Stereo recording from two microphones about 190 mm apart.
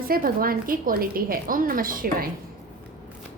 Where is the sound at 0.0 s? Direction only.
50° right (ahead or behind).